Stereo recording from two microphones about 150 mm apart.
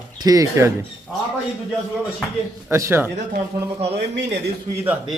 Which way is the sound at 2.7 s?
15° right (ahead or behind).